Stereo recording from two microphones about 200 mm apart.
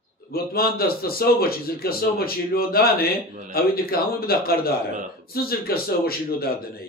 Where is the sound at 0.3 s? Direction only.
50° left (ahead or behind).